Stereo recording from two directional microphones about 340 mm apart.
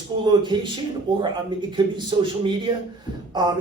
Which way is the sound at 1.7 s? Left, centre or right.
Centre.